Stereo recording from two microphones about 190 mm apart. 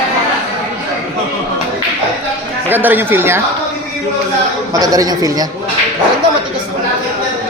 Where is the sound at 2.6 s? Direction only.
10° right (ahead or behind).